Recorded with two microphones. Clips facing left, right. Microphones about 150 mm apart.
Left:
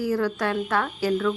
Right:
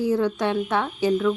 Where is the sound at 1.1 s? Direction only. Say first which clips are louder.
Right 3 dB; 10° right (ahead or behind).